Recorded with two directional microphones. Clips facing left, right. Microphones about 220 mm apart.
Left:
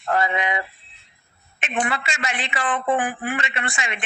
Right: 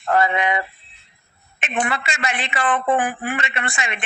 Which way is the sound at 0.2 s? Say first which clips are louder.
Right 4 dB; 60° right (ahead or behind).